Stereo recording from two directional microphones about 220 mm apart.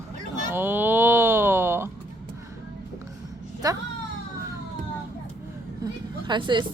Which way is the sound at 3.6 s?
15° right (ahead or behind).